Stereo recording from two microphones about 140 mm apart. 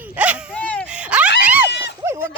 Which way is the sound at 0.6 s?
10° left (ahead or behind).